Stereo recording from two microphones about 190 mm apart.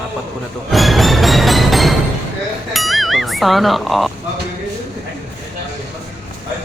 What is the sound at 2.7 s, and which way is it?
Speech, centre (ahead or behind).